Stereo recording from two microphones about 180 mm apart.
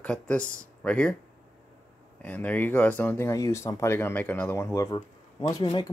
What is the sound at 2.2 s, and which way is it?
Speech, 10° left (ahead or behind).